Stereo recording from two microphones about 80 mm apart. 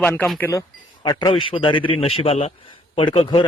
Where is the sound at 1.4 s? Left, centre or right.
Left.